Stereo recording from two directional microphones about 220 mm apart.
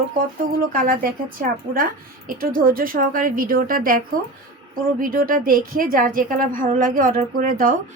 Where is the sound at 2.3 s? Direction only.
40° right (ahead or behind).